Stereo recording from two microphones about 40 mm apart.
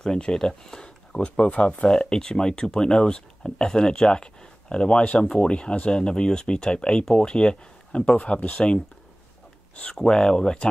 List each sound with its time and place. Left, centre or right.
0.0 s speech: centre
1.5 s speech: left
8.2 s speech: left
9.9 s speech: centre